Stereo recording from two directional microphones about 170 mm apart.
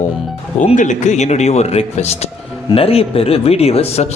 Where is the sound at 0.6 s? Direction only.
45° left (ahead or behind).